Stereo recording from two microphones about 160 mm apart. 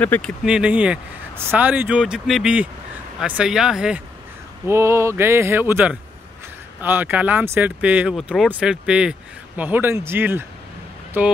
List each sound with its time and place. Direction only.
0.0 s speech: 10° left (ahead or behind)
0.5 s speech: 5° right (ahead or behind)
4.6 s speech: 15° right (ahead or behind)